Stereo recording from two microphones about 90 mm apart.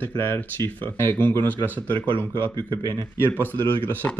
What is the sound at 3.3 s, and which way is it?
Speech, 20° left (ahead or behind).